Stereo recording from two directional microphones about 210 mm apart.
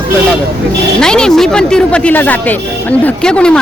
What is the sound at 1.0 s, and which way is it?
Speech, 5° left (ahead or behind).